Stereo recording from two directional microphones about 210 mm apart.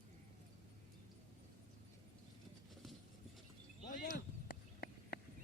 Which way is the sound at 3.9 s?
40° left (ahead or behind).